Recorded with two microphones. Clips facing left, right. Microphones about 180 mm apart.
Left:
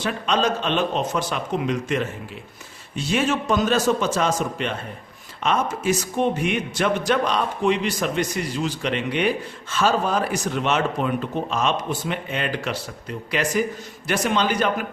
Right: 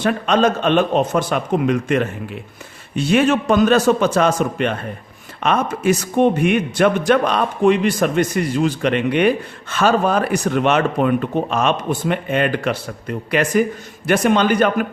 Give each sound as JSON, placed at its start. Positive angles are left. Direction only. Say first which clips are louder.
{"t": 0.0, "sound": "a man's voice", "louder": "right 6 dB", "side_deg": -55}